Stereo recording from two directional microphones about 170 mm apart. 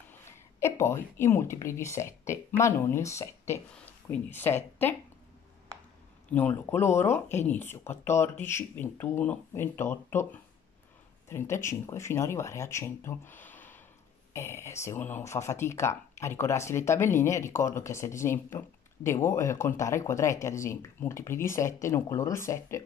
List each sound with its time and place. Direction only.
0.2 s speech: 15° left (ahead or behind)
6.3 s speech: 10° left (ahead or behind)